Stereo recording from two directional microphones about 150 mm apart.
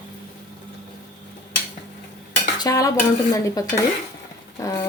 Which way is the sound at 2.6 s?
20° left (ahead or behind).